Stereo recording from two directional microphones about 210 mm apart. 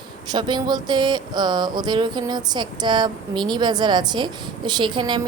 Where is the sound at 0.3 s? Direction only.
20° right (ahead or behind).